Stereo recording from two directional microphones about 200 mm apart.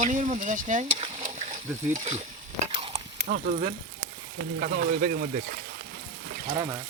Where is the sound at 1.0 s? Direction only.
35° right (ahead or behind).